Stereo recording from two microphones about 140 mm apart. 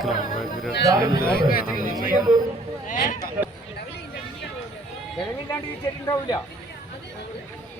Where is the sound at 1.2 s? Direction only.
90° left.